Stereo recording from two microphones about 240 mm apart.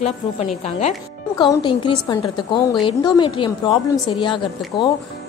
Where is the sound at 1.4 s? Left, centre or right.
Centre.